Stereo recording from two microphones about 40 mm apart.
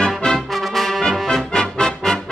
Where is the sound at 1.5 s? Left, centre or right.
Centre.